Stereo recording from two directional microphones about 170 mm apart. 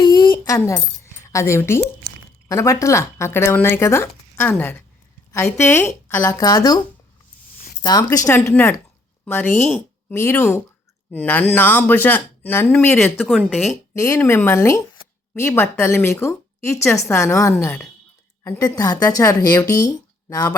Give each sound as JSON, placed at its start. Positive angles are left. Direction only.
{"t": 0.0, "sound": "a sound", "side_deg": 25}
{"t": 2.5, "sound": "speech", "side_deg": 20}
{"t": 7.8, "sound": "speech", "side_deg": 25}
{"t": 14.0, "sound": "speech", "side_deg": 15}